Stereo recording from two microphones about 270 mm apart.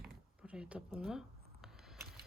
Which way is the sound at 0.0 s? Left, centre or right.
Centre.